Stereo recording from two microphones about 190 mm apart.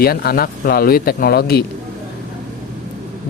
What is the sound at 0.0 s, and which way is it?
Speech, 55° left (ahead or behind).